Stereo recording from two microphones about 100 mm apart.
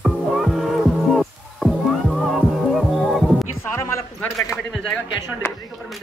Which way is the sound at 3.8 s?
30° left (ahead or behind).